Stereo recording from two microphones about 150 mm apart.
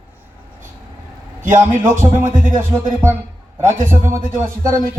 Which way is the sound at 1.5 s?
15° right (ahead or behind).